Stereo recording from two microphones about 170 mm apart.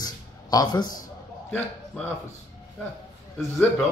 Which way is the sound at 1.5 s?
10° left (ahead or behind).